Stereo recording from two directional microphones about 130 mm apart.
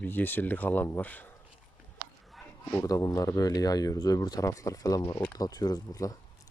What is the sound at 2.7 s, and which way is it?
Speech, 25° left (ahead or behind).